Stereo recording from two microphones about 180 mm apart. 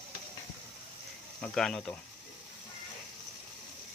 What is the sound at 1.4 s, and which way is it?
Speech, 5° left (ahead or behind).